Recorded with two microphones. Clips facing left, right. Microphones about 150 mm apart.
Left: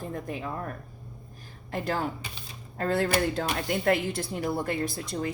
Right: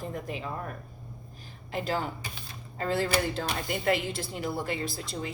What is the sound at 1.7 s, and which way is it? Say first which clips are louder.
A woman's voice: left 1 dB; 55° left (ahead or behind).